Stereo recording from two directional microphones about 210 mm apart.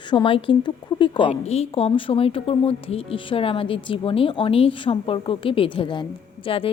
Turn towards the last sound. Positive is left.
turn(degrees=25)  # may be behind; listen again after turning